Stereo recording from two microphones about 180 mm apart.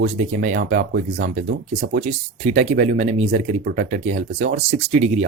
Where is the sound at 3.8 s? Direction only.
40° right (ahead or behind).